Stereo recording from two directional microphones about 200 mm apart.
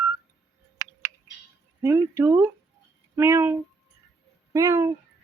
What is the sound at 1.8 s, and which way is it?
Speech, 10° right (ahead or behind).